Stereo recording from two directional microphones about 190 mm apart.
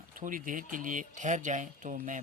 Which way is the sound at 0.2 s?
45° right (ahead or behind).